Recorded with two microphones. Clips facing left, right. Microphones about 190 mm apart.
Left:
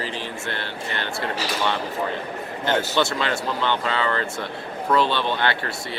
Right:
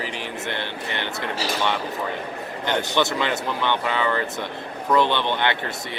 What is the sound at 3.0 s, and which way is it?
Speech, 20° right (ahead or behind).